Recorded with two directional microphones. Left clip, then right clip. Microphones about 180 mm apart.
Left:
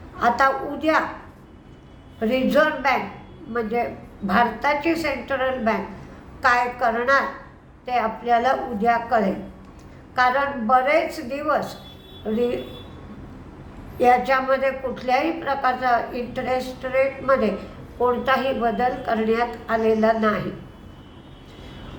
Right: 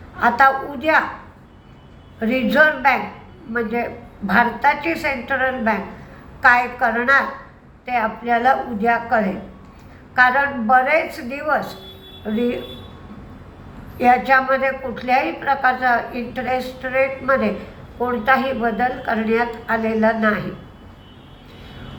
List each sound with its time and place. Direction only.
0.2 s a woman's voice: 15° left (ahead or behind)
2.1 s a woman's voice: 15° left (ahead or behind)
14.0 s a woman's voice: 15° left (ahead or behind)